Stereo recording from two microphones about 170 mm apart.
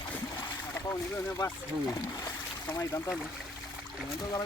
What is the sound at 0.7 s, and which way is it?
Speech, 15° left (ahead or behind).